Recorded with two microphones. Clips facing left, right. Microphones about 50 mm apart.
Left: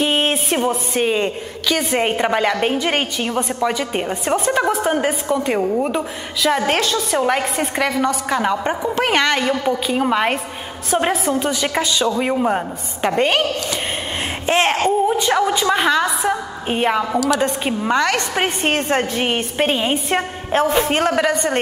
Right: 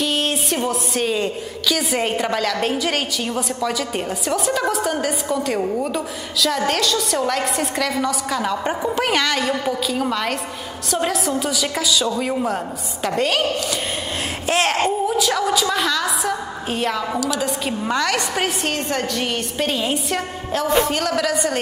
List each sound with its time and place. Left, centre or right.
0.0 s music: left
1.0 s a woman's voice: left
4.3 s a woman's voice: left
14.4 s a sound: left
15.0 s a woman's voice: left
17.1 s a woman's voice: centre
17.6 s a woman's voice: centre
18.7 s a woman's voice: left